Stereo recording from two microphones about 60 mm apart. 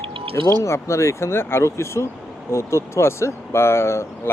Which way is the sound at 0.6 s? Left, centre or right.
Left.